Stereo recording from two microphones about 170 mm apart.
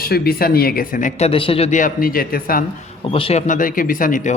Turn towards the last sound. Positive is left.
turn(degrees=50)  # may be behind; listen again after turning